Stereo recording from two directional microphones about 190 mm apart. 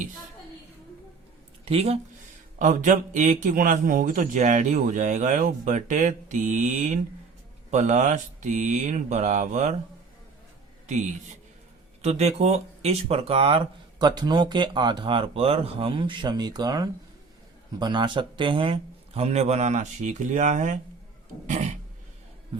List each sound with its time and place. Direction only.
1.6 s a man's voice: 30° right (ahead or behind)
10.8 s a man's voice: 40° right (ahead or behind)